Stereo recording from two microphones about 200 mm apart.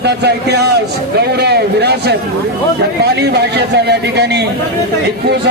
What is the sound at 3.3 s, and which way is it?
A man's voice, 55° right (ahead or behind).